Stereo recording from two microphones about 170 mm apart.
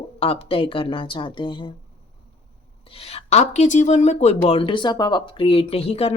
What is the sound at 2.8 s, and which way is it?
Speech, 35° left (ahead or behind).